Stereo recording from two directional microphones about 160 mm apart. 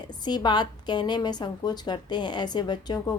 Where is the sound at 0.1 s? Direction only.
25° left (ahead or behind).